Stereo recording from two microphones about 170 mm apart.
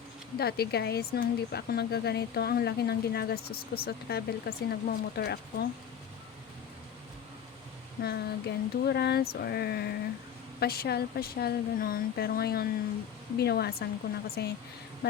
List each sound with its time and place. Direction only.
0.3 s speech: 70° left (ahead or behind)
8.0 s speech: 75° left (ahead or behind)